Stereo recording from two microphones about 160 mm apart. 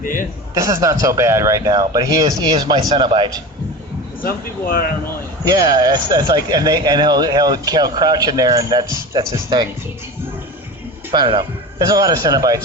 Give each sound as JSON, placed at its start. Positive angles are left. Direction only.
{"t": 0.0, "sound": "speech", "side_deg": 60}
{"t": 0.5, "sound": "a man's voice", "side_deg": -20}
{"t": 4.2, "sound": "speech", "side_deg": 65}
{"t": 5.5, "sound": "a man's voice", "side_deg": -25}
{"t": 11.1, "sound": "a man's voice", "side_deg": -25}